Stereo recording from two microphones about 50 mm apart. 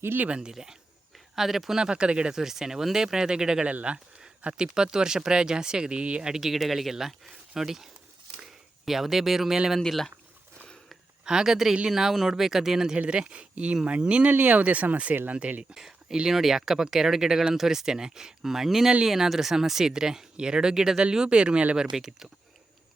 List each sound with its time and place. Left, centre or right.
0.3 s speech: right
3.7 s speech: right
6.3 s speech: centre
8.4 s a sound: centre
11.3 s speech: centre
13.0 s speech: right
15.7 s speech: centre
21.8 s speech: centre